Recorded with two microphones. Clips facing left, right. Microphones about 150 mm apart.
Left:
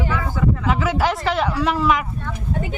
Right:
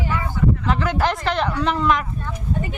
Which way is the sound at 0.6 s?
5° left (ahead or behind).